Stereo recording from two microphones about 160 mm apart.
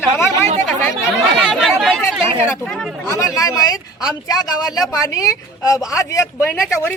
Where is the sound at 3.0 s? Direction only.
15° left (ahead or behind).